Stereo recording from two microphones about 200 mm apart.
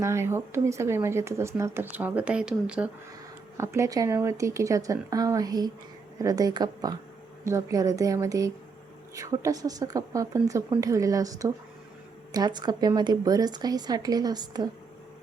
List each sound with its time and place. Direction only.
0.0 s speech: 15° right (ahead or behind)